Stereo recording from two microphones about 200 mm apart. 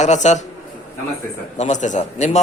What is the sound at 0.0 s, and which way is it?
Speech, 35° left (ahead or behind).